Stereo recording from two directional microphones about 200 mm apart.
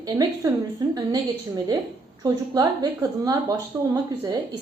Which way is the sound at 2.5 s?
15° right (ahead or behind).